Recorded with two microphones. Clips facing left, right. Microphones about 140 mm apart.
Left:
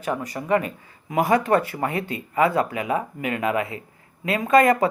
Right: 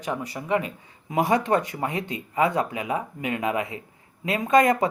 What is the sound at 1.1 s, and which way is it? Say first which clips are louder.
Speech: left 2 dB; 25° right (ahead or behind).